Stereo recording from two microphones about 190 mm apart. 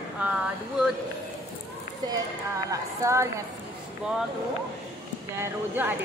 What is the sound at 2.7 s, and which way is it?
Speech, 15° right (ahead or behind).